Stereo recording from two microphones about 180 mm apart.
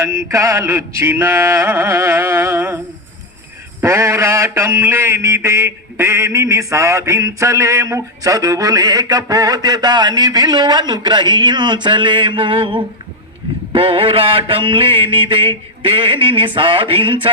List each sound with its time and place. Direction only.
0.0 s male singing: 15° right (ahead or behind)
3.8 s mantra: 15° right (ahead or behind)